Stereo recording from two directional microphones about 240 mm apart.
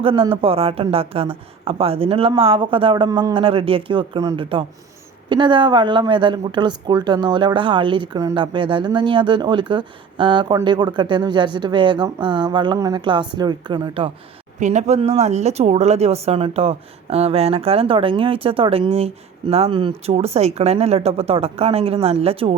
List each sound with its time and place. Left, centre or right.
0.0 s speech: right
14.6 s speech: right